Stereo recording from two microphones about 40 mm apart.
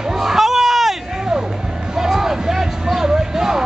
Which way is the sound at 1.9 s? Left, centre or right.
Centre.